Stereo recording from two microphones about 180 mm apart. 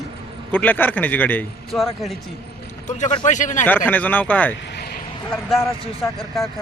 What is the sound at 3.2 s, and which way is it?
Speech, 45° left (ahead or behind).